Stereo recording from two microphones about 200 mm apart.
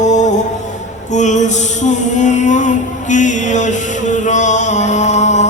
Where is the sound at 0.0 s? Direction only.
35° left (ahead or behind).